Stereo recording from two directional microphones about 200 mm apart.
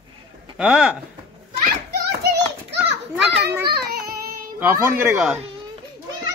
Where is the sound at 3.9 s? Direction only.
50° right (ahead or behind).